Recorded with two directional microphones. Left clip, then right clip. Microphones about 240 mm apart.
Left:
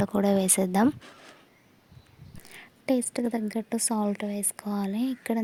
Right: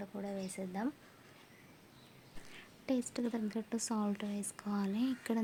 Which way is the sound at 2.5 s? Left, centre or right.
Left.